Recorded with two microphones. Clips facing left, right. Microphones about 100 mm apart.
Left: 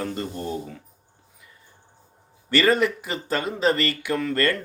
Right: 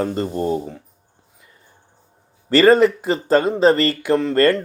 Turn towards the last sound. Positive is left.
turn(degrees=-30)  # may be behind; listen again after turning